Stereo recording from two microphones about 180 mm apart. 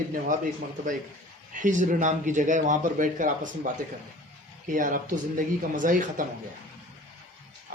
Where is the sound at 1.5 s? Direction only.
45° right (ahead or behind).